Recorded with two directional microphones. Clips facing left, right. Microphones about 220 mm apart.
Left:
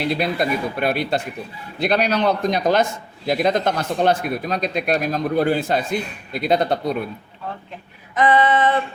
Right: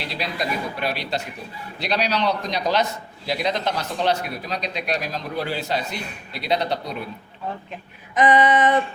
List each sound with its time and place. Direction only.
0.0 s a man's voice: 55° left (ahead or behind)
8.1 s female singing: 20° right (ahead or behind)